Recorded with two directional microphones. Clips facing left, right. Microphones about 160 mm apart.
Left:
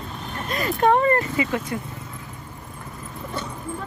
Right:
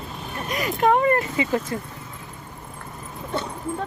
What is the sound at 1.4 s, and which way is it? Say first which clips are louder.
Speech: right 1 dB; 30° right (ahead or behind).